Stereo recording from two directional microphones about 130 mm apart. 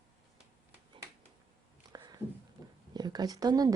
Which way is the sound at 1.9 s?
30° right (ahead or behind).